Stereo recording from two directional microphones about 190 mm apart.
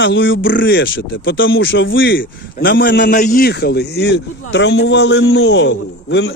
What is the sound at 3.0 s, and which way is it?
A man's voice, 45° left (ahead or behind).